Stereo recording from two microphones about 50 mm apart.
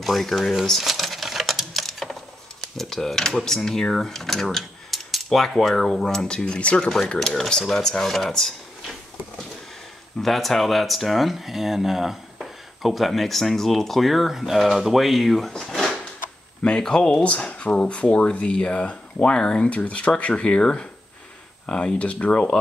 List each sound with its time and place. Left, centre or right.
0.0 s speech: centre
0.7 s a sound: centre
2.8 s speech: centre; by 6.9 s left
6.9 s speech: centre
10.2 s speech: centre
16.6 s speech: centre